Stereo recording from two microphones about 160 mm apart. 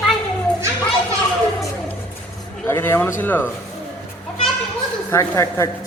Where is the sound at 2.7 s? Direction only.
15° left (ahead or behind).